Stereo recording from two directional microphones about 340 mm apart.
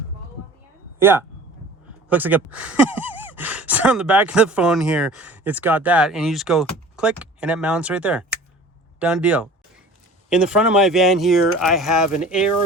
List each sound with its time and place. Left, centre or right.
0.9 s speech: centre